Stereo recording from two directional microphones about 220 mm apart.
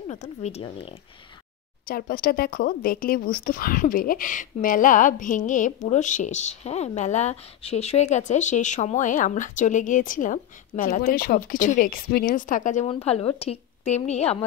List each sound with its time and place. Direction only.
0.1 s a woman's voice: 30° left (ahead or behind)
1.9 s speech: 40° left (ahead or behind)